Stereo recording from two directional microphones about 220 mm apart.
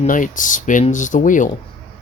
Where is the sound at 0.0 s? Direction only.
35° left (ahead or behind).